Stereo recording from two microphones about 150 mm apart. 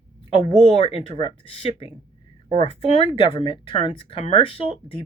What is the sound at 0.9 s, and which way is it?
Speech, 40° left (ahead or behind).